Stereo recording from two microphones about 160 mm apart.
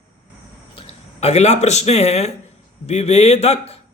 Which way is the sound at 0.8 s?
40° left (ahead or behind).